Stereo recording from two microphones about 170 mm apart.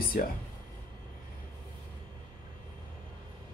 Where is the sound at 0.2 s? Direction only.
60° left (ahead or behind).